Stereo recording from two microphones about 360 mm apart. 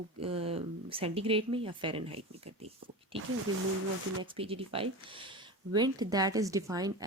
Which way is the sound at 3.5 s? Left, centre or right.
Right.